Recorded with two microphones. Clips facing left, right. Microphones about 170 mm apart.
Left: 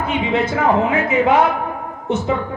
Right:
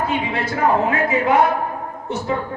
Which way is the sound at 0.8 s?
20° left (ahead or behind).